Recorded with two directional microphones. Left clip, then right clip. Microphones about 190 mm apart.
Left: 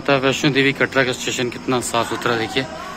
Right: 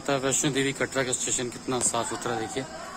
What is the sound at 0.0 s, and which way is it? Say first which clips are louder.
Speech: left 9 dB; 15° right (ahead or behind).